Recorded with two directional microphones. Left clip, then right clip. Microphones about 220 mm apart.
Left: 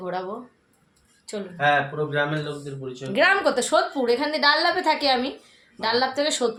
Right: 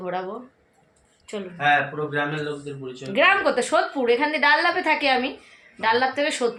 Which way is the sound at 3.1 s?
5° left (ahead or behind).